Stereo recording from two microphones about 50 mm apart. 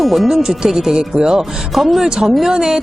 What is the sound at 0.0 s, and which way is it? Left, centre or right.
A woman's voice, centre.